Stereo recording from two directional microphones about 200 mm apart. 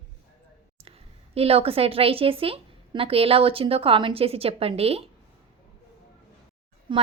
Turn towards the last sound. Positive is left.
turn(degrees=-25)  # may be behind; listen again after turning